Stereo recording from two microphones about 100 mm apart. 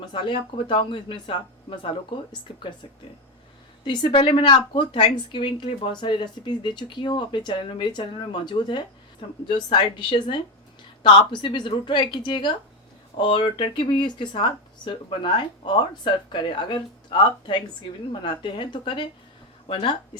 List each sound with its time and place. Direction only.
0.0 s a woman's voice: 55° left (ahead or behind)
3.8 s a woman's voice: 55° left (ahead or behind)
19.6 s speech: 65° left (ahead or behind)